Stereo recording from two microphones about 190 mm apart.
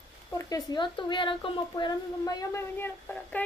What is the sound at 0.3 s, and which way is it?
Speech, 20° left (ahead or behind).